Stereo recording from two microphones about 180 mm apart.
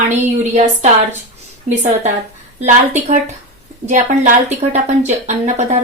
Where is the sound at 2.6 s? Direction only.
40° right (ahead or behind).